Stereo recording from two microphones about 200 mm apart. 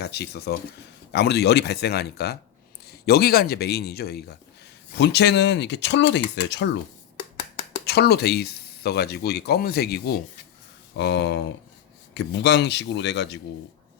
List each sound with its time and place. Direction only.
0.0 s speech: 55° left (ahead or behind)
7.9 s speech: 55° left (ahead or behind)